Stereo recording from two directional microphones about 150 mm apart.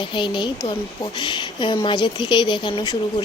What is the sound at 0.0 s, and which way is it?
Speech, 35° left (ahead or behind).